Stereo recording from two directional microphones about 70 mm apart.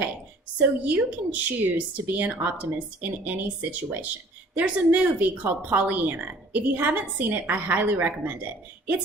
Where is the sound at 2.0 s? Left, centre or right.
Right.